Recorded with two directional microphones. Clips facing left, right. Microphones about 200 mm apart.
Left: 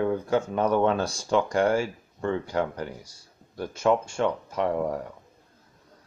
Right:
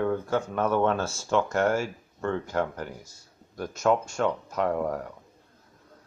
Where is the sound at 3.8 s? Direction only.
10° left (ahead or behind).